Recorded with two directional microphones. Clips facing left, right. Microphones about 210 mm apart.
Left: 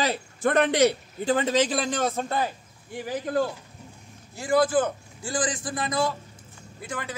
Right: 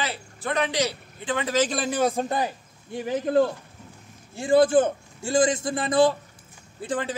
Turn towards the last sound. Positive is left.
turn(degrees=-30)  # may be behind; listen again after turning